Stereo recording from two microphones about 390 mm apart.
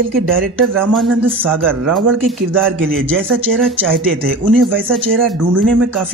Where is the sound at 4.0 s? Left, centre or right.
Right.